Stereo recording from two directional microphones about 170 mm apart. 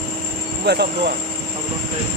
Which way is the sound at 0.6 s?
70° right (ahead or behind).